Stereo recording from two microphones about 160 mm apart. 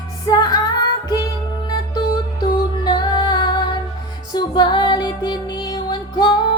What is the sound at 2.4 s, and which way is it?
Music, 25° left (ahead or behind).